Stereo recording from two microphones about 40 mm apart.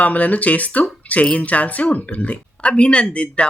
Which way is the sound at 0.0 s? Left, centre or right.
Left.